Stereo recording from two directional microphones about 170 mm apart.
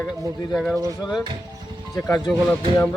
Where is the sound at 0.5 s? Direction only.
5° left (ahead or behind).